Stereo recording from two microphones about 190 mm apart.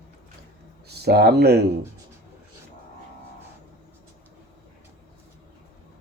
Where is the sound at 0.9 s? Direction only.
60° right (ahead or behind).